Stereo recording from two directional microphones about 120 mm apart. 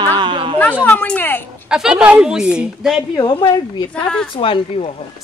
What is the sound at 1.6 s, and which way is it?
Speech, 5° right (ahead or behind).